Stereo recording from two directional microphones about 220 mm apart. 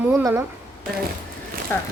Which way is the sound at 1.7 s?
10° left (ahead or behind).